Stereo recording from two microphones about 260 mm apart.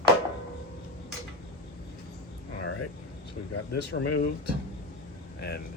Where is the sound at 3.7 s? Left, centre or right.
Left.